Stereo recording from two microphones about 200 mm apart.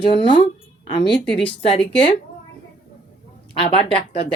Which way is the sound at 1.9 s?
5° left (ahead or behind).